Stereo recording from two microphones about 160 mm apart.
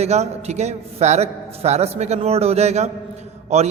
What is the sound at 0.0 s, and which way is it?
A man's voice, 45° right (ahead or behind).